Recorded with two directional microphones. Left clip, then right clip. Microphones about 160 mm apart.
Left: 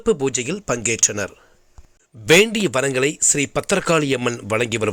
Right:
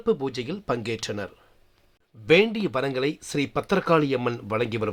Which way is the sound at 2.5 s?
10° left (ahead or behind).